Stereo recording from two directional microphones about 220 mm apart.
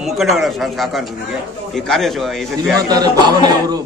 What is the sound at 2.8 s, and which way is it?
Speech, 15° right (ahead or behind).